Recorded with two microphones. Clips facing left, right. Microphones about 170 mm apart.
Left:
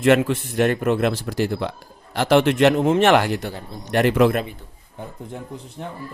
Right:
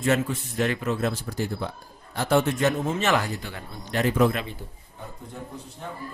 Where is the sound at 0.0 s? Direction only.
90° left.